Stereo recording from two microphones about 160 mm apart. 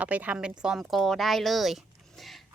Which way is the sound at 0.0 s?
10° right (ahead or behind).